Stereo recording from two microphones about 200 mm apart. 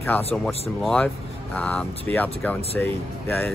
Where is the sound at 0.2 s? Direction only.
30° left (ahead or behind).